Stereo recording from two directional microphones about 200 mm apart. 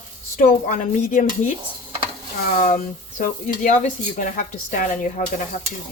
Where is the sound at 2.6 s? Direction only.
40° left (ahead or behind).